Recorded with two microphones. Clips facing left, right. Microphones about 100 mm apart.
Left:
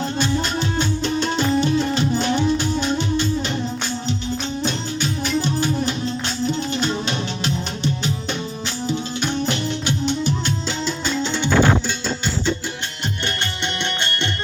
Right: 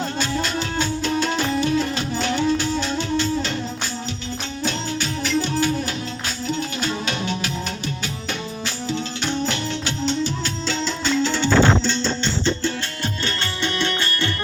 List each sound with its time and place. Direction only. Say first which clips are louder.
0.8 s music: right 1 dB; 25° left (ahead or behind)
4.6 s music: left 1 dB; 20° left (ahead or behind)
8.9 s music: left 1 dB; 15° left (ahead or behind)
13.7 s music: right 1 dB; 20° left (ahead or behind)